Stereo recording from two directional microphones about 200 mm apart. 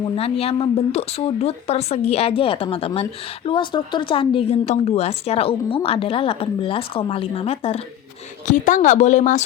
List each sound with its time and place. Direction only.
0.0 s speech: 30° left (ahead or behind)